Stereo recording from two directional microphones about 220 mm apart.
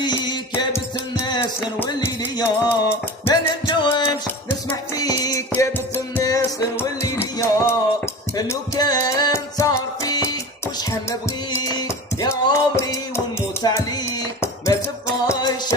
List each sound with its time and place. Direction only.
0.0 s music: 20° left (ahead or behind)
11.5 s music: 15° left (ahead or behind)